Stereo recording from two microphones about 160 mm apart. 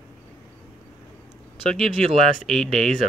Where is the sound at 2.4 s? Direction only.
Centre (ahead or behind).